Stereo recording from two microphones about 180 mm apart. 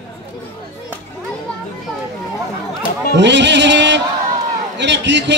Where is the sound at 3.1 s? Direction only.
75° right (ahead or behind).